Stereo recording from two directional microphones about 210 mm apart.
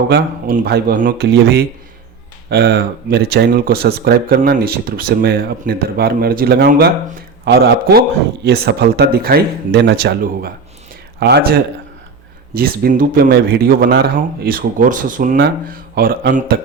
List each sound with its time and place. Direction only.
0.1 s speech: 45° right (ahead or behind)
2.5 s speech: 50° right (ahead or behind)
12.5 s speech: 45° right (ahead or behind)